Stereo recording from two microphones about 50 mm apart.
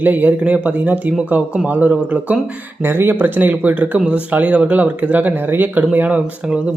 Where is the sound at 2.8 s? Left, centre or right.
Right.